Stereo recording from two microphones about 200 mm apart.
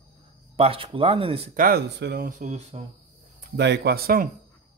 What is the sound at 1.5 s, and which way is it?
Speech, 50° right (ahead or behind).